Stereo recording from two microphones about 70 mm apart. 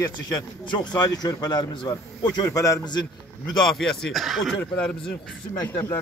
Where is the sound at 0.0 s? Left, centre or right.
Left.